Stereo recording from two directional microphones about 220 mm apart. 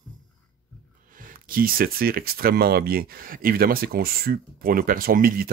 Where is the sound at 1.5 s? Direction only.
40° right (ahead or behind).